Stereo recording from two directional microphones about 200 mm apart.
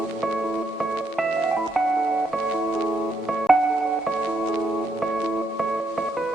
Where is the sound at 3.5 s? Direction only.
Centre (ahead or behind).